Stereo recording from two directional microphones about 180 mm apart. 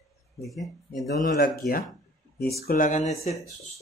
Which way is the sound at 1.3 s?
50° left (ahead or behind).